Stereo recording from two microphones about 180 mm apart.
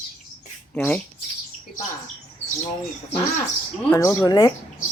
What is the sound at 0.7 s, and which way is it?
Speech, 10° left (ahead or behind).